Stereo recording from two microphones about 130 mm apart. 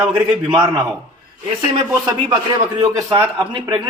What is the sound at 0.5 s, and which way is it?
Speech, 35° right (ahead or behind).